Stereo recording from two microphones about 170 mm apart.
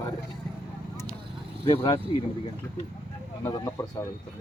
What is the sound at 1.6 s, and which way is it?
Speech, 30° left (ahead or behind).